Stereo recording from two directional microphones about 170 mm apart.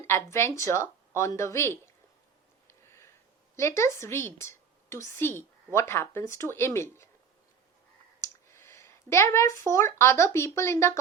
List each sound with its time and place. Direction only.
0.1 s a woman's voice: 15° left (ahead or behind)
2.6 s a sound: 15° left (ahead or behind)
3.5 s a woman's voice: 15° left (ahead or behind)
8.2 s speech: 15° left (ahead or behind)